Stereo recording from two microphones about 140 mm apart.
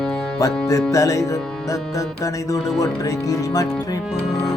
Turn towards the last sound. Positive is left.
turn(degrees=25)  # may be behind; listen again after turning